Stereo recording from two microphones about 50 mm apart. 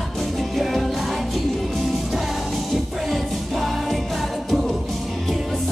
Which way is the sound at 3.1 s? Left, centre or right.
Centre.